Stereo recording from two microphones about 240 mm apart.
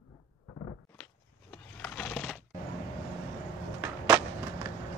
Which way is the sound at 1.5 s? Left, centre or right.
Centre.